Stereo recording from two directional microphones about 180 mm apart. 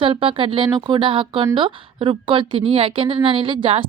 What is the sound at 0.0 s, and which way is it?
A woman's voice, 30° right (ahead or behind).